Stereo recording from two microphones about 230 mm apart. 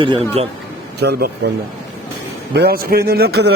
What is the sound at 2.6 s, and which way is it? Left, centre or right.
Speech, right.